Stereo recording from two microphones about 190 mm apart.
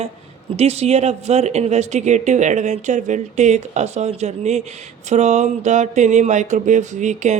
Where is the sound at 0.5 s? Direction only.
35° right (ahead or behind).